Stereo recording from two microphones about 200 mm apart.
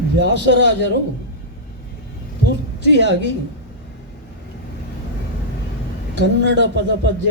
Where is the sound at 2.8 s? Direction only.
60° right (ahead or behind).